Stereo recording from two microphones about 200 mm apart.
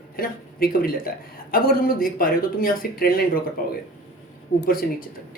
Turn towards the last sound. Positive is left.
turn(degrees=45)  # may be behind; listen again after turning